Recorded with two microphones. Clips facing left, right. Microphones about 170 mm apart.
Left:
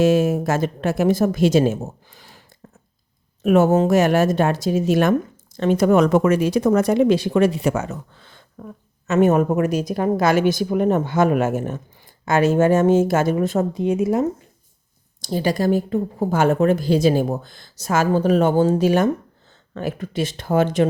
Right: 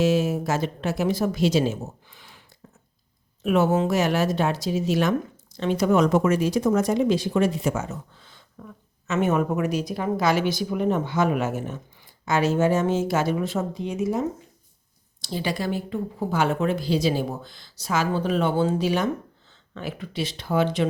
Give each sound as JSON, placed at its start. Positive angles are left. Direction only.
{"t": 0.0, "sound": "speech", "side_deg": 50}
{"t": 3.4, "sound": "speech", "side_deg": 45}
{"t": 8.5, "sound": "speech", "side_deg": 45}
{"t": 15.2, "sound": "speech", "side_deg": 45}